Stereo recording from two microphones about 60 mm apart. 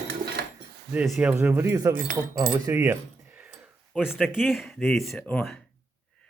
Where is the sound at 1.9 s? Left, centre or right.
Right.